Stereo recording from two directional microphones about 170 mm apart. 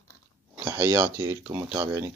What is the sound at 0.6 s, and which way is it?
Speech, 25° right (ahead or behind).